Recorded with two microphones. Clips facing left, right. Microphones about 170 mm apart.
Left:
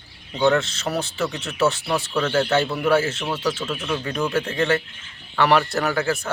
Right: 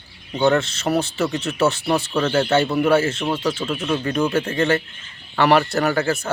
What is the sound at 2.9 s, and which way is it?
Speech, centre (ahead or behind).